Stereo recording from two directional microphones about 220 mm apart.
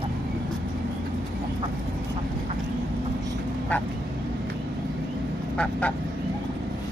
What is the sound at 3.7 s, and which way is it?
Quack, 5° left (ahead or behind).